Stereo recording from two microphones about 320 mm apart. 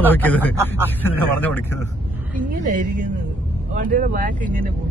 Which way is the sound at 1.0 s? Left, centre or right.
Centre.